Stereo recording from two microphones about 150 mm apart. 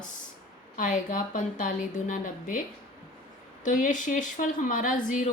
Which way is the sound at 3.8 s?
60° left (ahead or behind).